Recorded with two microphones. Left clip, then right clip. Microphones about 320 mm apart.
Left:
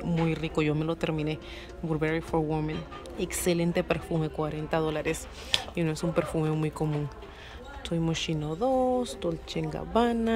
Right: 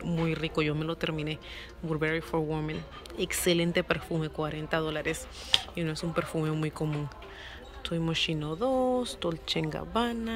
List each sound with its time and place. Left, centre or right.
0.3 s speech: centre